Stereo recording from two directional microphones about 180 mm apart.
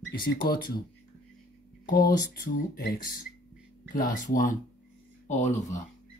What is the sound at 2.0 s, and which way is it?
Speech, 50° left (ahead or behind).